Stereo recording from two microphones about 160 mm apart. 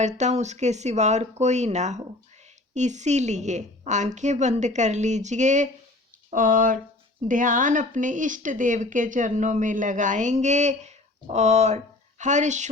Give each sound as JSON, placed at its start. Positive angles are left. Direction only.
{"t": 0.0, "sound": "speech", "side_deg": -45}